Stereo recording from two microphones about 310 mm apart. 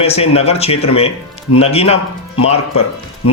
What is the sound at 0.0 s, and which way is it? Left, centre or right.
Speech, centre.